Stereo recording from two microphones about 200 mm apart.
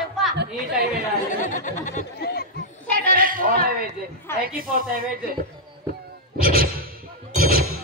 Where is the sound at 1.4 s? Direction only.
40° left (ahead or behind).